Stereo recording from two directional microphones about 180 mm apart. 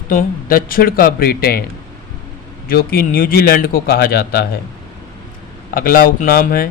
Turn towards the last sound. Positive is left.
turn(degrees=55)  # may be behind; listen again after turning